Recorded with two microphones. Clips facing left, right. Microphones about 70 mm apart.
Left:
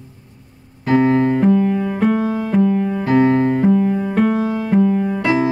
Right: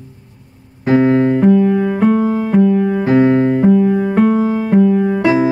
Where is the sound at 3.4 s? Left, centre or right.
Centre.